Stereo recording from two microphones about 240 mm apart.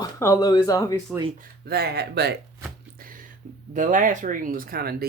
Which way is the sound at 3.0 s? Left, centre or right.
Right.